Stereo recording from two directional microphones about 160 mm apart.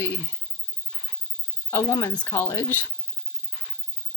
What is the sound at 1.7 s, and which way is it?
Speech, 20° left (ahead or behind).